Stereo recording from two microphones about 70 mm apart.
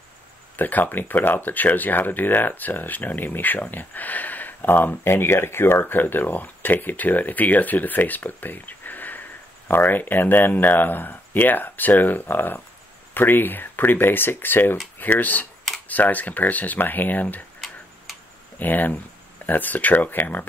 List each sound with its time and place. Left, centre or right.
0.6 s speech: left
18.6 s speech: left